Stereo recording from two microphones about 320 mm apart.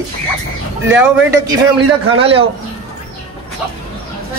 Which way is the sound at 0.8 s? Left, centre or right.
Centre.